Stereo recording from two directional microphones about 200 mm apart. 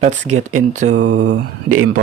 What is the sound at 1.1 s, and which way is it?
Speech, 65° right (ahead or behind).